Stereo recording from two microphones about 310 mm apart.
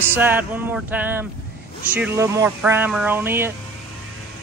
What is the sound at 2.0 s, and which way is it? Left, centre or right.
Speech, centre.